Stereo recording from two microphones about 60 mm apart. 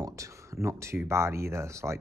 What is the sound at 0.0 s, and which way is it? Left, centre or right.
Speech, right.